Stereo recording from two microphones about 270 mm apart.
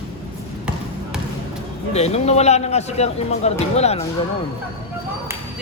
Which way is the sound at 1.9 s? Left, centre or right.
Left.